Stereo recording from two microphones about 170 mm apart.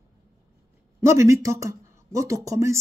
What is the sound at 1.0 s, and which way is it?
Speech, 15° right (ahead or behind).